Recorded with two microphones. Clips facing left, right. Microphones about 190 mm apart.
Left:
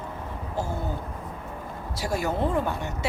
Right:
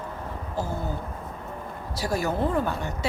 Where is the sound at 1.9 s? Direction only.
20° left (ahead or behind).